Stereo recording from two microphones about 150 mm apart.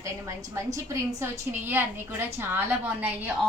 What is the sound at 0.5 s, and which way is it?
A woman's voice, 20° right (ahead or behind).